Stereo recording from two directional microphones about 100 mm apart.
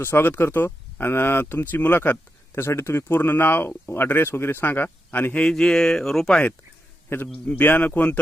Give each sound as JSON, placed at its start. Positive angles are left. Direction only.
{"t": 0.0, "sound": "speech", "side_deg": 20}
{"t": 7.3, "sound": "speech", "side_deg": 20}